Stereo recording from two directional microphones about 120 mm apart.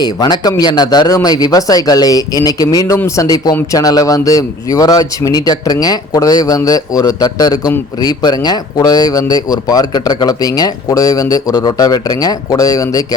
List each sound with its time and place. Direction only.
0.0 s speech: 35° left (ahead or behind)